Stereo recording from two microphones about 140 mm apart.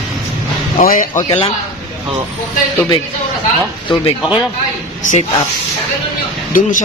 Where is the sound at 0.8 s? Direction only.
70° left (ahead or behind).